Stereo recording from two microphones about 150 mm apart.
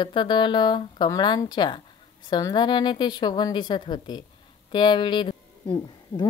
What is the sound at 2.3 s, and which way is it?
A woman's voice, 25° left (ahead or behind).